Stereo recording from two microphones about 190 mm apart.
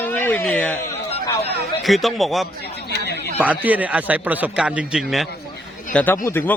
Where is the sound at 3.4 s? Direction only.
10° right (ahead or behind).